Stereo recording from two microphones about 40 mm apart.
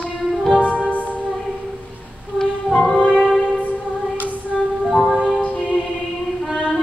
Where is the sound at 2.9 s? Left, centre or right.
Left.